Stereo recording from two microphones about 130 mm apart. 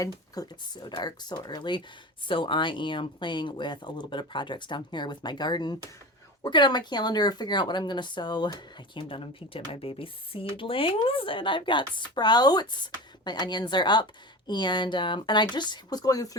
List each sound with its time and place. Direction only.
0.0 s speech: 30° left (ahead or behind)